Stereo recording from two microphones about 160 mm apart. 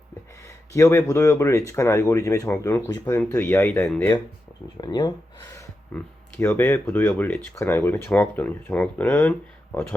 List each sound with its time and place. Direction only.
0.4 s speech: 20° left (ahead or behind)
4.8 s speech: 25° left (ahead or behind)
5.9 s speech: 10° left (ahead or behind)